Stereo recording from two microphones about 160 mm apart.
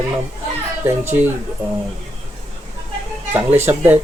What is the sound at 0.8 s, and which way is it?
Speech, 15° right (ahead or behind).